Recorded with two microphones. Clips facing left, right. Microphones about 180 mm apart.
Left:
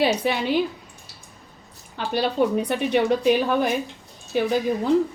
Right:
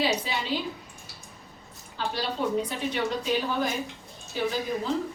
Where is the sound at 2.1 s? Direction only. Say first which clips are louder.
Left 7 dB; 60° left (ahead or behind).